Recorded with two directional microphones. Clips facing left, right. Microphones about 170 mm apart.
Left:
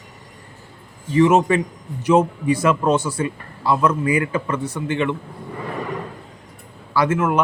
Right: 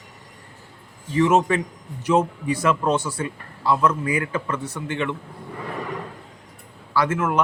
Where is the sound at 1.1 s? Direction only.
15° left (ahead or behind).